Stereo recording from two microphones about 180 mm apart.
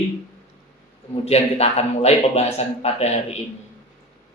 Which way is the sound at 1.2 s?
35° left (ahead or behind).